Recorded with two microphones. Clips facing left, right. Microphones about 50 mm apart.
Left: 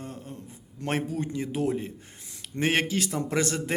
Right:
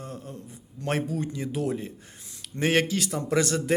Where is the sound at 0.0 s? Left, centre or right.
Left.